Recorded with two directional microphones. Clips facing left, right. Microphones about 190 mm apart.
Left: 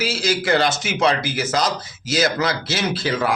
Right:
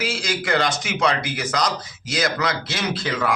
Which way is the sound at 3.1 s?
30° left (ahead or behind).